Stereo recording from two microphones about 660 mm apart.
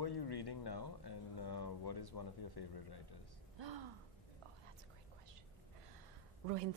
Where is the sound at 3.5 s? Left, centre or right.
Right.